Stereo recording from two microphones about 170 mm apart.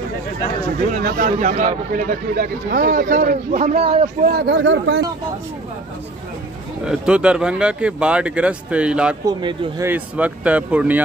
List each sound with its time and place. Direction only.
0.9 s speech: 55° right (ahead or behind)
3.7 s speech: 35° right (ahead or behind)
4.3 s speech: 80° right
6.8 s speech: 5° right (ahead or behind)
9.2 s speech: 25° right (ahead or behind)
9.8 s speech: 10° right (ahead or behind)